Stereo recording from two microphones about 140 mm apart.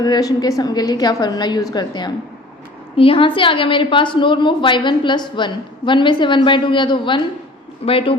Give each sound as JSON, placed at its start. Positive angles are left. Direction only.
{"t": 0.0, "sound": "a woman's voice", "side_deg": 25}